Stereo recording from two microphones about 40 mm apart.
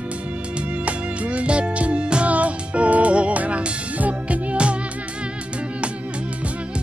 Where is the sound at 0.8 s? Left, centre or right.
Right.